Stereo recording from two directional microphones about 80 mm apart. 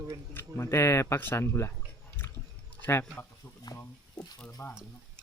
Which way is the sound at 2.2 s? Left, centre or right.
Left.